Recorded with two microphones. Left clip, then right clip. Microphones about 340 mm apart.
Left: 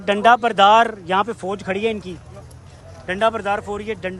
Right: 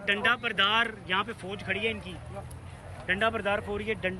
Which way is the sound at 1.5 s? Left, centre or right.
Left.